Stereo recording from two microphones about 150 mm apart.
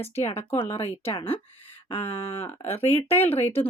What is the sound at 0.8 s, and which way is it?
Speech, 40° left (ahead or behind).